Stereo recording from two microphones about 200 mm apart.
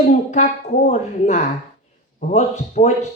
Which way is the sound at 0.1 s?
35° left (ahead or behind).